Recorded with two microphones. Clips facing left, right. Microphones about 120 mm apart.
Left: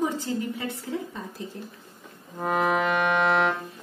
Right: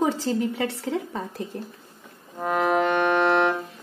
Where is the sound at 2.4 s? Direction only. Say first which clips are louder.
Right 2 dB; centre (ahead or behind).